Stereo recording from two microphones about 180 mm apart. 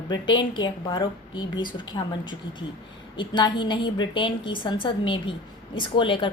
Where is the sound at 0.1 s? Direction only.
25° left (ahead or behind).